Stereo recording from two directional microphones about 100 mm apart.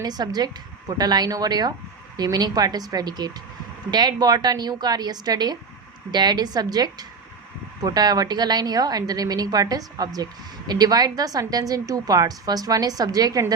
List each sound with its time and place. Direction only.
0.0 s a woman's voice: 40° right (ahead or behind)